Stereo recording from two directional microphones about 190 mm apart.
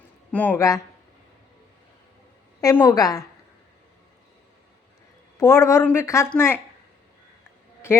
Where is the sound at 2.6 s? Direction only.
15° left (ahead or behind).